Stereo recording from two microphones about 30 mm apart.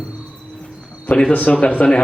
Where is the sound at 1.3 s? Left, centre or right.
Left.